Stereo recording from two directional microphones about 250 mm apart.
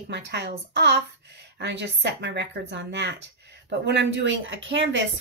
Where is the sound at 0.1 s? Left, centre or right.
Right.